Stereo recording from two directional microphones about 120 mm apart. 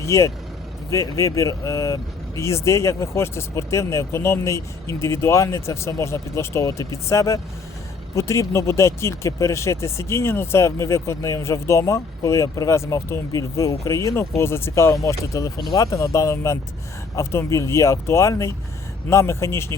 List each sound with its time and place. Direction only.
0.0 s speech: 25° left (ahead or behind)